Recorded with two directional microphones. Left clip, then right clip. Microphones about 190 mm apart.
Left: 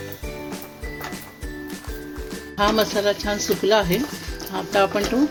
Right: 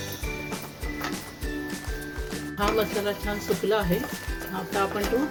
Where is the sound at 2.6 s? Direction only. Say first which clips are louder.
Left 6 dB; 50° left (ahead or behind).